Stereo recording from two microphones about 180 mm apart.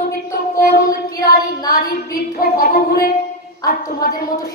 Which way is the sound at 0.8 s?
20° left (ahead or behind).